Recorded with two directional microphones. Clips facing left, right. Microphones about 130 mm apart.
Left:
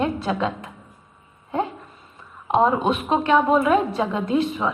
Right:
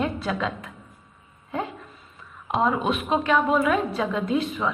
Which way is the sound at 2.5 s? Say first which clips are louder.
Left 4 dB; 35° left (ahead or behind).